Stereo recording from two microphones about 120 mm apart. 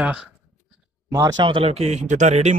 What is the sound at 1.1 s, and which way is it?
Speech, 30° right (ahead or behind).